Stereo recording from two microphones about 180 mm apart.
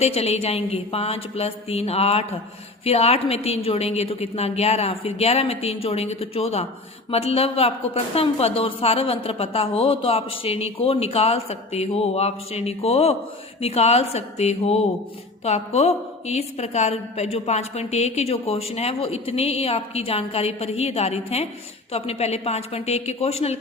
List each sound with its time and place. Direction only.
0.0 s a woman's voice: 35° left (ahead or behind)